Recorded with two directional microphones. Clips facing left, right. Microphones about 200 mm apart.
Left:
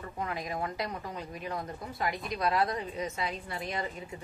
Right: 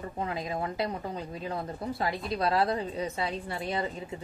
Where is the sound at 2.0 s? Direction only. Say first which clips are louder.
Right 1 dB; 30° right (ahead or behind).